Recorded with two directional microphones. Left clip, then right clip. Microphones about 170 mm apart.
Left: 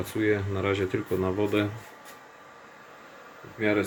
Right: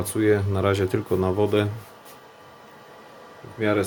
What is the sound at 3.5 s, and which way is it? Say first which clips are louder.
Speech: right 3 dB; 10° right (ahead or behind).